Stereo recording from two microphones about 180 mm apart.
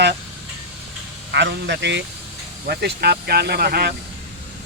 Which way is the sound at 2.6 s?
60° right (ahead or behind).